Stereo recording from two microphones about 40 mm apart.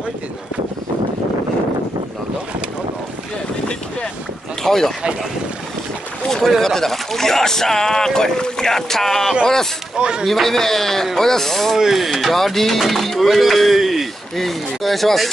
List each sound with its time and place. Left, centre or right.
4.6 s speech: centre
6.6 s speech: centre
9.9 s speech: right
10.2 s speech: centre
11.7 s speech: centre